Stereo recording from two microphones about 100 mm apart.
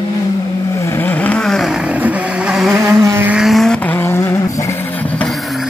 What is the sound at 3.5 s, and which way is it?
Vehicle, 5° left (ahead or behind).